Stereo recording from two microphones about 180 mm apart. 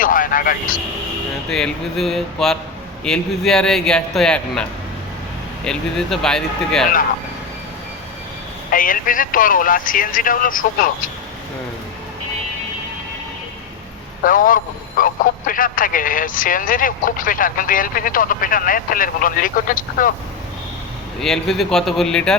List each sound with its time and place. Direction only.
0.0 s vehicle: 50° left (ahead or behind)
1.5 s a man's voice: 5° left (ahead or behind)
5.6 s a man's voice: 5° left (ahead or behind)
8.7 s speech: 50° left (ahead or behind)
14.3 s speech: 50° left (ahead or behind)
21.2 s a man's voice: centre (ahead or behind)